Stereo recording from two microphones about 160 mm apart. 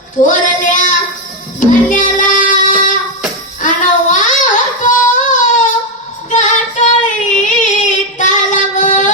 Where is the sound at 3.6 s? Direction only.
55° left (ahead or behind).